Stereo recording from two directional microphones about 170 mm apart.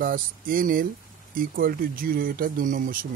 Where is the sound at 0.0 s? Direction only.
55° right (ahead or behind).